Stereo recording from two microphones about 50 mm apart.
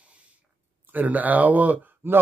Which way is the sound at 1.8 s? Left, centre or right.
Right.